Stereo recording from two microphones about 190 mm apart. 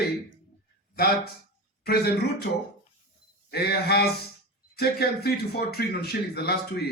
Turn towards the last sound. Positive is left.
turn(degrees=60)  # may be behind; listen again after turning